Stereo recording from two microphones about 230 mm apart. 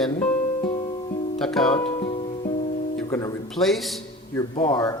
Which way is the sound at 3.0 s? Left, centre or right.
Centre.